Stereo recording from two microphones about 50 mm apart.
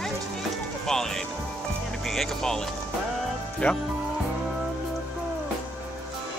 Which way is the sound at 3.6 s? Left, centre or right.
Left.